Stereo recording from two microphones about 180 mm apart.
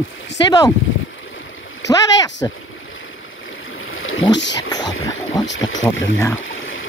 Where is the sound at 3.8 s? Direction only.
90° left.